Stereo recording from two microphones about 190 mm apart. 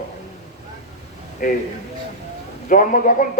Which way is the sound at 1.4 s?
45° left (ahead or behind).